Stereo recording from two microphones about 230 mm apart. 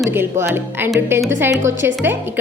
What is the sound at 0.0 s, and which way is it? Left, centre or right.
A woman's voice, centre.